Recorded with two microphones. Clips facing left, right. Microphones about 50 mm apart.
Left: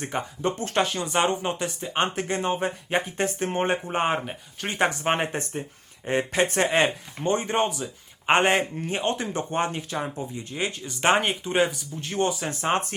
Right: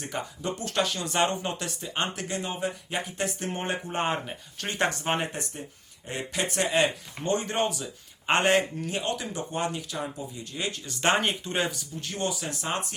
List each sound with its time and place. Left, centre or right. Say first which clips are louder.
0.0 s speech: left 5 dB; left
1.1 s speech: left 2 dB; centre
5.1 s speech: left 4 dB; left; by 11.7 s centre
11.9 s speech: left 7 dB; left